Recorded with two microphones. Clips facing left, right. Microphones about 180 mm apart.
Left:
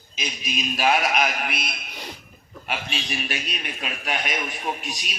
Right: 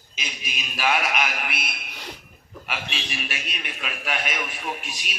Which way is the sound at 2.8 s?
40° left (ahead or behind).